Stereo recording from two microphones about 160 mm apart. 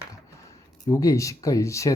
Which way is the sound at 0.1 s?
20° left (ahead or behind).